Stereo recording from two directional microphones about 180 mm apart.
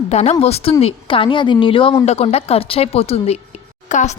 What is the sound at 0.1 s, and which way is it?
A woman's voice, 35° left (ahead or behind).